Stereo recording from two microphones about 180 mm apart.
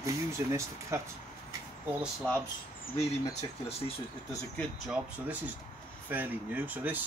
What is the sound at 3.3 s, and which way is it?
Speech, 35° left (ahead or behind).